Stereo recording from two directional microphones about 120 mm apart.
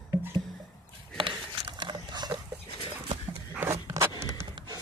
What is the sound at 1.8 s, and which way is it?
Dog, 40° right (ahead or behind).